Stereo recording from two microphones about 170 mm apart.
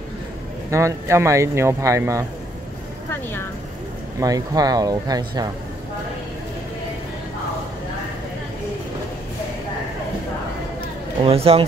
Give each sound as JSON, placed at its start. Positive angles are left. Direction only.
{"t": 0.7, "sound": "speech", "side_deg": -15}
{"t": 4.2, "sound": "speech", "side_deg": -20}
{"t": 11.2, "sound": "speech", "side_deg": -35}